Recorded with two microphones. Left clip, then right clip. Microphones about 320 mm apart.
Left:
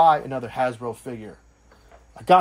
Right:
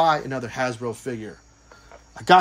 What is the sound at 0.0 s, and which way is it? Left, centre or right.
Speech, centre.